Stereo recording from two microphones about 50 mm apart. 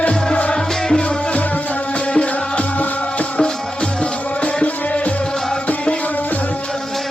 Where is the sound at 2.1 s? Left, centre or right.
Left.